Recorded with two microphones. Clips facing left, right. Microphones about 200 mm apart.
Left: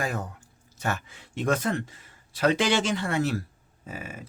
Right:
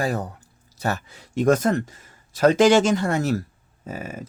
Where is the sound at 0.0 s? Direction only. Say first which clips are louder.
Right 6 dB; 35° right (ahead or behind).